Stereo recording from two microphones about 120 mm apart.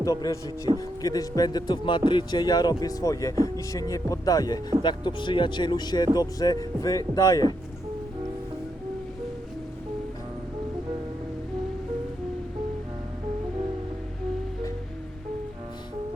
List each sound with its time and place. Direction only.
0.0 s speech: 30° left (ahead or behind)